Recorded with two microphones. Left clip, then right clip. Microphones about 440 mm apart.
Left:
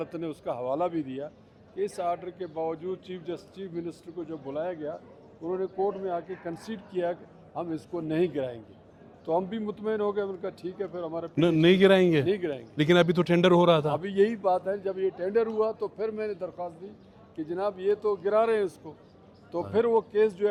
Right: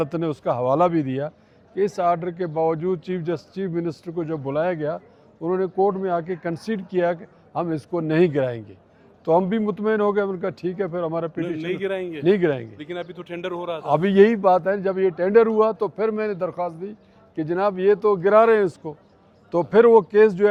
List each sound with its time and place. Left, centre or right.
0.0 s speech: right
11.6 s a man's voice: left
12.2 s speech: right
12.7 s a man's voice: left
13.9 s speech: right